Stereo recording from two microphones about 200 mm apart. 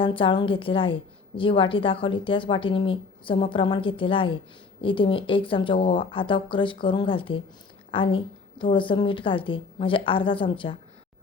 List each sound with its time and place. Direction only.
0.0 s a woman's voice: 25° left (ahead or behind)